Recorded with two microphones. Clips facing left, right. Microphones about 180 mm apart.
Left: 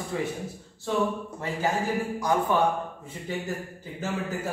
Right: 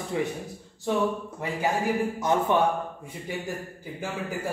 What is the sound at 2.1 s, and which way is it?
Speech, 25° right (ahead or behind).